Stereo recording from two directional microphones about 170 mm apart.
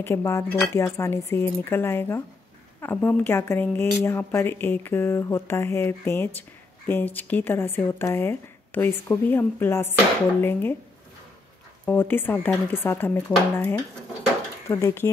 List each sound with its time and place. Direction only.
0.0 s a woman's voice: 15° left (ahead or behind)
11.8 s a woman's voice: 10° left (ahead or behind)